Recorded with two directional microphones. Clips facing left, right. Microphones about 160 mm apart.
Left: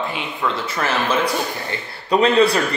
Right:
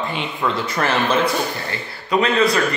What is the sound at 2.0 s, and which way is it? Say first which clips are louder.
Speech: left 2 dB; 35° left (ahead or behind).